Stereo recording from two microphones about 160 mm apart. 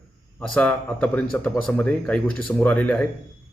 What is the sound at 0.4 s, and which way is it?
A man's voice, 5° left (ahead or behind).